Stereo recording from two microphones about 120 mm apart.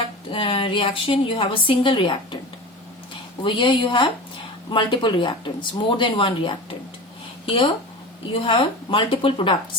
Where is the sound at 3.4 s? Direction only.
40° left (ahead or behind).